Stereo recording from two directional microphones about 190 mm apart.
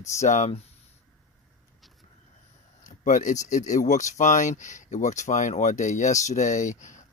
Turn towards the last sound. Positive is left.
turn(degrees=40)  # may be behind; listen again after turning